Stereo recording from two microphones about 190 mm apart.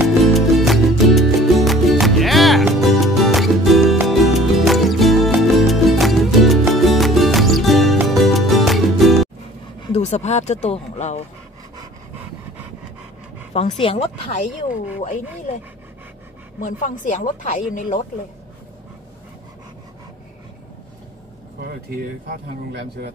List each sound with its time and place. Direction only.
0.3 s music: centre (ahead or behind)
9.9 s speech: 35° left (ahead or behind)
13.5 s speech: 35° left (ahead or behind)
15.0 s speech: 45° left (ahead or behind)
16.5 s speech: 45° left (ahead or behind)
21.5 s speech: 55° right (ahead or behind)